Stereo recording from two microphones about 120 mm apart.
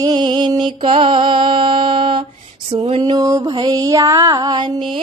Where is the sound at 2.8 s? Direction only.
70° right (ahead or behind).